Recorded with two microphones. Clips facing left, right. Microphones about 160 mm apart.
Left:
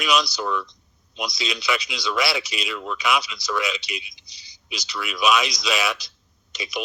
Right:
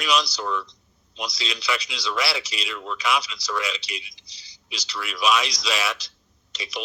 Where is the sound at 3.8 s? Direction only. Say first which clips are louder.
Left 3 dB; 35° right (ahead or behind).